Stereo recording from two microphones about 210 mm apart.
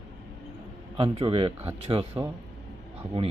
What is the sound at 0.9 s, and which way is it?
Speech, 25° right (ahead or behind).